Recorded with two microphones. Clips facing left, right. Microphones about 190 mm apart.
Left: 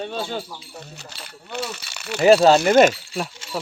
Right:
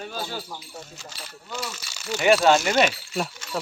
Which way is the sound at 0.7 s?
65° left (ahead or behind).